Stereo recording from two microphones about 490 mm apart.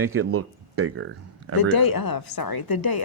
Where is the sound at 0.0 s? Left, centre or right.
Right.